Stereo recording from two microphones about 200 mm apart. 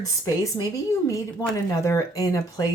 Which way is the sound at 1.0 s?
15° left (ahead or behind).